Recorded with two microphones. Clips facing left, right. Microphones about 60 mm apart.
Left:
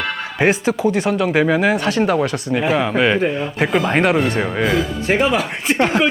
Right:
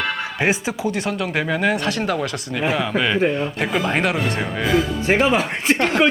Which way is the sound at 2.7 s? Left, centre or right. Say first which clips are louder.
Left 5 dB; centre.